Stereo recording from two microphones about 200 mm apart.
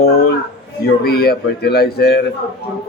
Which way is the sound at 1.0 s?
50° left (ahead or behind).